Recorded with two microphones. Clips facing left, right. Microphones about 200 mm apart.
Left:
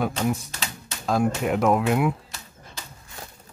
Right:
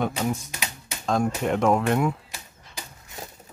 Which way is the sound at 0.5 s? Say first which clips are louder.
Even; 15° right (ahead or behind).